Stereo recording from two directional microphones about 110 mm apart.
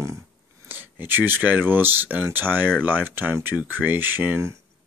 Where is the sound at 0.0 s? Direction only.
25° right (ahead or behind).